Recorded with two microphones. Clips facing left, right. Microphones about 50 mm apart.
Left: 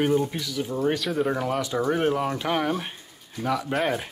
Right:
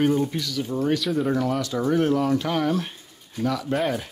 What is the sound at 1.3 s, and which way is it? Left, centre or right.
Speech, centre.